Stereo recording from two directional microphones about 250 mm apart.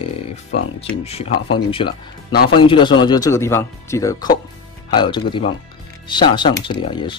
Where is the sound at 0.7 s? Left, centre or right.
Left.